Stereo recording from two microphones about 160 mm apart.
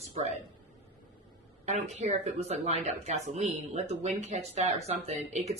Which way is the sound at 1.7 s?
45° right (ahead or behind).